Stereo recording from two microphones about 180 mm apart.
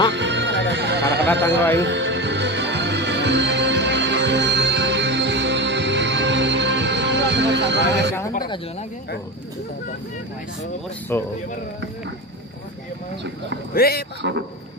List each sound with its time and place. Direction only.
0.1 s music: 80° right
1.2 s speech: 10° left (ahead or behind)
1.8 s music: 80° right
11.1 s speech: 10° left (ahead or behind)
13.7 s speech: 60° left (ahead or behind)